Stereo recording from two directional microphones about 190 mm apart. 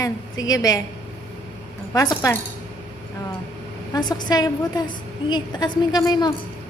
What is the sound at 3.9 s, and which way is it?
A woman's voice, 20° left (ahead or behind).